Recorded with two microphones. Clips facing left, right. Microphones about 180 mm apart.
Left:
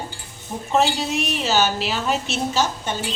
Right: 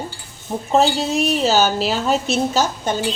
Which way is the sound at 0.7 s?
35° right (ahead or behind).